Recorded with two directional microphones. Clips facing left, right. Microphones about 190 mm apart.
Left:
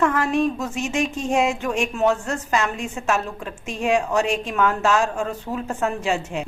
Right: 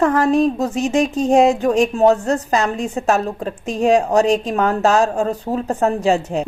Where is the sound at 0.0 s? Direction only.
35° right (ahead or behind).